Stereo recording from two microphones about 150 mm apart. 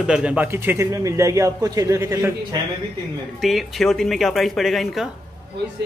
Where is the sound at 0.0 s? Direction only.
5° right (ahead or behind).